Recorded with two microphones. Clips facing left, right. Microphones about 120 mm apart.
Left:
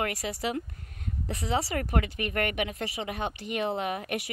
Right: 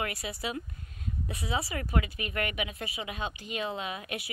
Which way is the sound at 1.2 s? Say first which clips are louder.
Left 4 dB; 40° left (ahead or behind).